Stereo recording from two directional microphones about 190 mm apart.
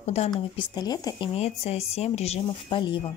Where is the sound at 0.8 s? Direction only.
20° left (ahead or behind).